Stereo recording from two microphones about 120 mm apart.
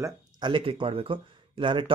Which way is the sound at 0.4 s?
45° right (ahead or behind).